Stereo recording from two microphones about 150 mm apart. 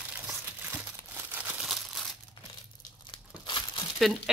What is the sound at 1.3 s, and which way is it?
Crumpling, 10° right (ahead or behind).